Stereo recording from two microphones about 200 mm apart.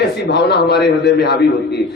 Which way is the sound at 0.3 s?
55° left (ahead or behind).